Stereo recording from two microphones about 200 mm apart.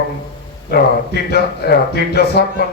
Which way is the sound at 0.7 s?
55° left (ahead or behind).